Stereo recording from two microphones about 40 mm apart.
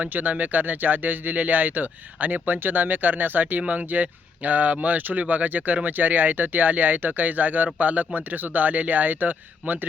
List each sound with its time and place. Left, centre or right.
0.1 s speech: right
3.7 s speech: right